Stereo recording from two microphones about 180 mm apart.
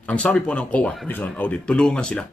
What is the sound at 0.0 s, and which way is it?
Speech, 5° left (ahead or behind).